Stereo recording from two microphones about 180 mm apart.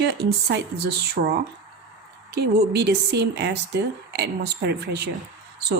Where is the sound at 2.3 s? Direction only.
65° right (ahead or behind).